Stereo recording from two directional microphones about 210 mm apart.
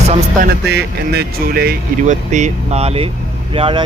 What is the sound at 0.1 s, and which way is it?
Speech, 40° right (ahead or behind).